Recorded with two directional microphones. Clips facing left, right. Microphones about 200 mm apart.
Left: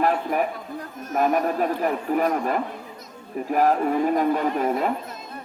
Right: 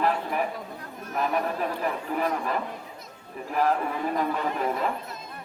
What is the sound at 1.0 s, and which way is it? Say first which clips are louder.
Speech: left 6 dB; 40° left (ahead or behind).